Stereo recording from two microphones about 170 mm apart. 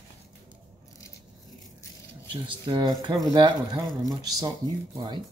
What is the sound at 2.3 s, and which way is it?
Speech, 30° right (ahead or behind).